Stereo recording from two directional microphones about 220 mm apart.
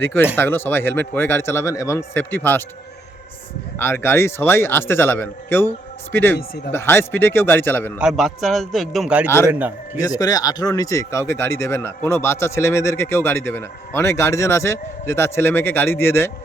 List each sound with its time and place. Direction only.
0.0 s speech: 10° left (ahead or behind)
3.8 s speech: 10° left (ahead or behind)
7.9 s a man's voice: centre (ahead or behind)
9.2 s speech: 10° left (ahead or behind)
9.5 s a man's voice: 10° right (ahead or behind)
10.0 s speech: 15° left (ahead or behind)